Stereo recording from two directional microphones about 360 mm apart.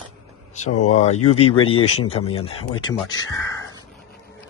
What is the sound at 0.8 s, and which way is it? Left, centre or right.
Speech, centre.